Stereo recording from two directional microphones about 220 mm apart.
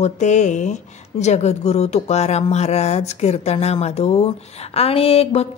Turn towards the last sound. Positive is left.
turn(degrees=30)  # may be behind; listen again after turning